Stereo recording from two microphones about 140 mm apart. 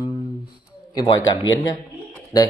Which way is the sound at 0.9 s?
30° left (ahead or behind).